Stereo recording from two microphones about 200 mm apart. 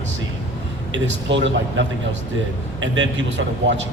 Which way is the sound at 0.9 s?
65° right (ahead or behind).